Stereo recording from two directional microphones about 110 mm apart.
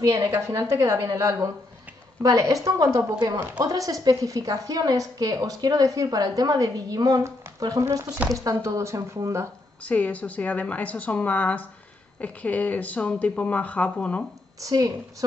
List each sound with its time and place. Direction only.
0.1 s a woman's voice: 25° right (ahead or behind)
9.8 s a woman's voice: 15° left (ahead or behind)
14.6 s a woman's voice: 30° right (ahead or behind)